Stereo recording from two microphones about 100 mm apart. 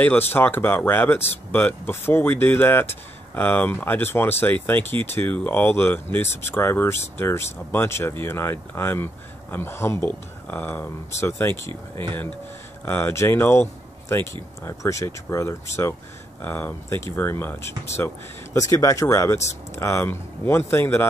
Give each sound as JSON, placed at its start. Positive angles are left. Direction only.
{"t": 0.0, "sound": "speech", "side_deg": 20}